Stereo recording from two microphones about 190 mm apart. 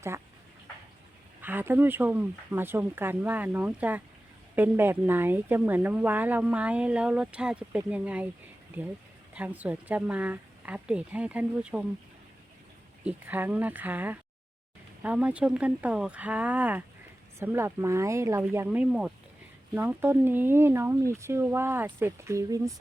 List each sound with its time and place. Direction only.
1.4 s speech: 10° right (ahead or behind)
13.1 s speech: 10° right (ahead or behind)